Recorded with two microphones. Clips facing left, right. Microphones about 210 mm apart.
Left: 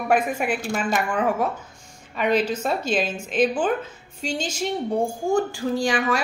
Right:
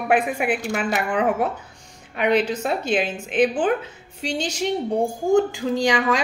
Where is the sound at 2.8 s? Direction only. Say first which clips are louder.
Right 1 dB; 55° right (ahead or behind).